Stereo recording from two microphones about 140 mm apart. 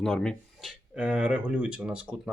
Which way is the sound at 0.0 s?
5° left (ahead or behind).